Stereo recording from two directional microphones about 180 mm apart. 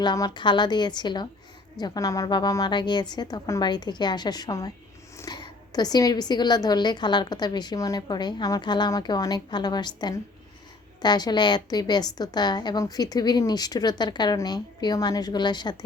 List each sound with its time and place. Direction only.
0.0 s a woman's voice: 25° left (ahead or behind)